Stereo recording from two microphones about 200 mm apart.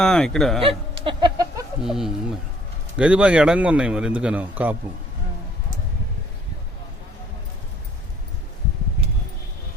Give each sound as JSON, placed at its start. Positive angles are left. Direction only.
{"t": 0.0, "sound": "a man's voice", "side_deg": 5}
{"t": 1.0, "sound": "a sound", "side_deg": -20}
{"t": 1.8, "sound": "a man's voice", "side_deg": 0}